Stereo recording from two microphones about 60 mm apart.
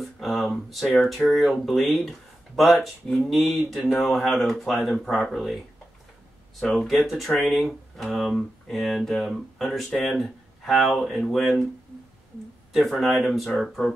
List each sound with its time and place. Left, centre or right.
0.2 s a sound: centre
0.9 s speech: centre
6.6 s speech: centre
7.1 s speech: centre
9.8 s speech: centre
12.7 s speech: centre